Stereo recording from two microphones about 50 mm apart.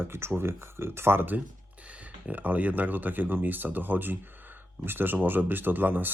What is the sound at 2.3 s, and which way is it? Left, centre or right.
Speech, right.